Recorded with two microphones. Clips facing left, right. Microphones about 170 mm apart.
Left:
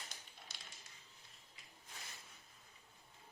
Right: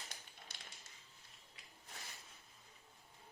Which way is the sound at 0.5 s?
55° right (ahead or behind).